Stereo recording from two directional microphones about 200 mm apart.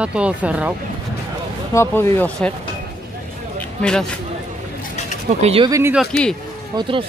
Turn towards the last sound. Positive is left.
turn(degrees=-25)  # may be behind; listen again after turning